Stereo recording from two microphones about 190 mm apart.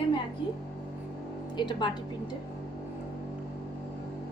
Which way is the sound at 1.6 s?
25° left (ahead or behind).